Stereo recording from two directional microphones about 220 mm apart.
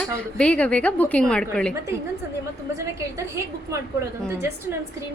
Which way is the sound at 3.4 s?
15° right (ahead or behind).